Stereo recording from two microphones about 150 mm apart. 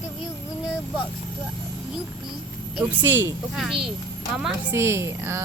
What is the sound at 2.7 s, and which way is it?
Speech, 10° right (ahead or behind).